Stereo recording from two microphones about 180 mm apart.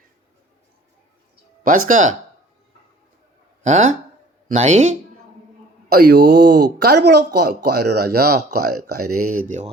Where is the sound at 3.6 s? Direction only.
40° right (ahead or behind).